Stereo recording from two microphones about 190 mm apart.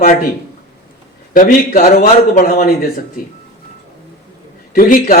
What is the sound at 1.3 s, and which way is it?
Speech, 45° left (ahead or behind).